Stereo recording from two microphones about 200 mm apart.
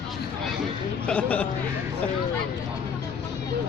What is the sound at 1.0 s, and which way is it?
Speech, 5° left (ahead or behind).